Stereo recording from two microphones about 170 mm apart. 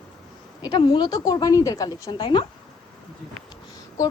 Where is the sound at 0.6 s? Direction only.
25° left (ahead or behind).